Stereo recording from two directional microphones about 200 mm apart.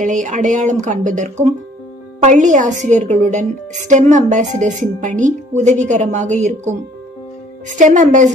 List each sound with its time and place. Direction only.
0.0 s a woman's voice: 40° right (ahead or behind)